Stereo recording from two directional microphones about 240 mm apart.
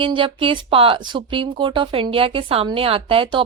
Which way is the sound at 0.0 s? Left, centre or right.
Right.